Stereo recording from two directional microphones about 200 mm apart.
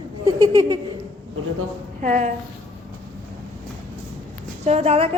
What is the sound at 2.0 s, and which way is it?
Speech, 40° right (ahead or behind).